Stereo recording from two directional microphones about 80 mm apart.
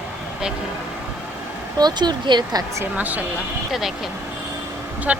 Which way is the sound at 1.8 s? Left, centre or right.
Right.